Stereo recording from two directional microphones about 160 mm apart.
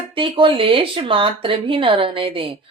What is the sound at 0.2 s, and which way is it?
Speech, 35° right (ahead or behind).